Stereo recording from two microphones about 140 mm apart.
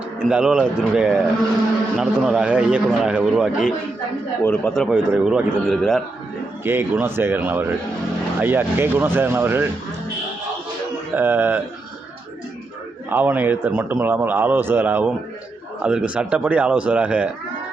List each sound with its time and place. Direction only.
0.3 s a man's voice: 5° right (ahead or behind)
4.4 s speech: 10° left (ahead or behind)
4.7 s speech: 5° right (ahead or behind)
6.7 s a man's voice: 15° right (ahead or behind)
11.1 s a man's voice: 15° right (ahead or behind)
13.1 s a man's voice: 15° right (ahead or behind)